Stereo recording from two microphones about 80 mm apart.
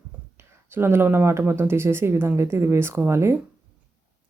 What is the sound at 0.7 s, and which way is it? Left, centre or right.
Speech, right.